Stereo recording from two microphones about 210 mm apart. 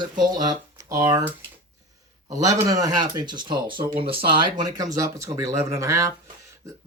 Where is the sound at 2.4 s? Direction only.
15° right (ahead or behind).